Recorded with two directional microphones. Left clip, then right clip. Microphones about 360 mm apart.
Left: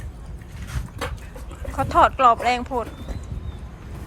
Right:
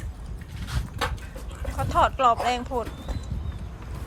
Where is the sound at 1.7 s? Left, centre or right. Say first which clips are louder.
Left 5 dB; centre.